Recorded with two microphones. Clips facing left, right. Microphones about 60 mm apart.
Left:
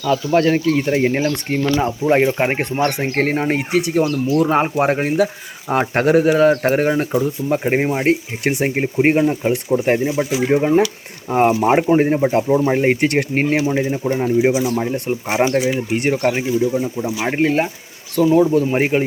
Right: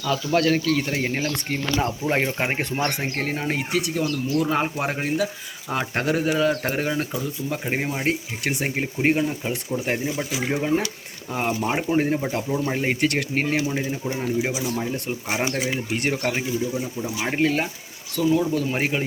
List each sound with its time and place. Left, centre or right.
0.0 s speech: centre
3.2 s speech: left
3.4 s speech: left
15.5 s speech: centre
16.7 s speech: left